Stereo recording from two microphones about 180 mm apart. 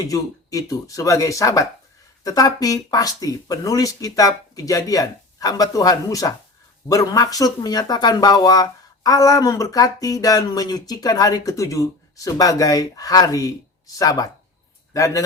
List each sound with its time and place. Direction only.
0.0 s speech: 20° left (ahead or behind)